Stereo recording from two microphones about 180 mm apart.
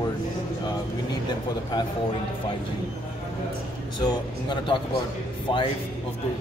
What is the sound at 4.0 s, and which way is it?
Speech, 25° left (ahead or behind).